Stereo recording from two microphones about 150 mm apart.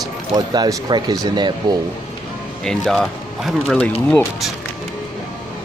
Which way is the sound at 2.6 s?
Centre (ahead or behind).